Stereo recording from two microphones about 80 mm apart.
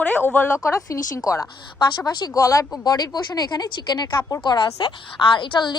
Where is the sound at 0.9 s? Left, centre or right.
Left.